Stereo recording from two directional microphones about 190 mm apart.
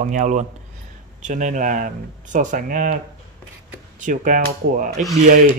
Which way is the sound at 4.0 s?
45° right (ahead or behind).